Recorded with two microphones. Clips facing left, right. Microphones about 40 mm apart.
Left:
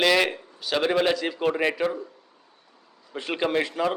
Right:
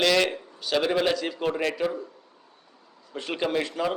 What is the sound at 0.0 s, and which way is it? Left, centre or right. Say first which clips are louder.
A man's voice: left 1 dB; centre.